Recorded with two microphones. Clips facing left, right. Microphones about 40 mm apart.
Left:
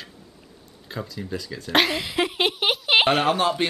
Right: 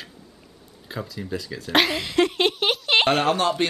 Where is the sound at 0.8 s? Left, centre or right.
Centre.